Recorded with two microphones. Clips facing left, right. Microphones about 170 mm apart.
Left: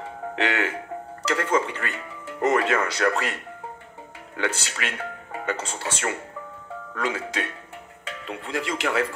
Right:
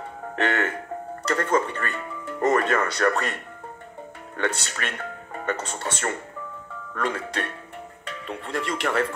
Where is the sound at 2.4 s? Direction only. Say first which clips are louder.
Even; 45° right (ahead or behind).